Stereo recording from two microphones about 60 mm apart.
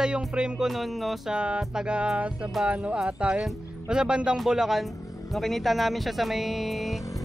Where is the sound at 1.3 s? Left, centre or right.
Centre.